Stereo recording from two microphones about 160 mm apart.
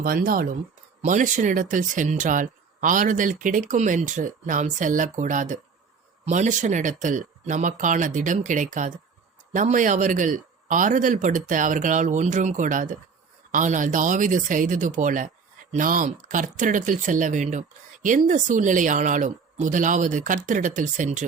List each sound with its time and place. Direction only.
0.0 s speech: 65° right (ahead or behind)
1.0 s speech: 50° right (ahead or behind)